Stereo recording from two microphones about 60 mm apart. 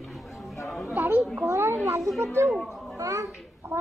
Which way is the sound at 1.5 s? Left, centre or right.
Right.